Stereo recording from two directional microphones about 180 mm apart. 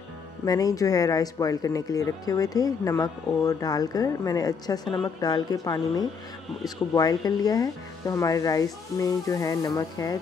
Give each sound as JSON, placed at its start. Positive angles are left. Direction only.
{"t": 0.5, "sound": "speech", "side_deg": 20}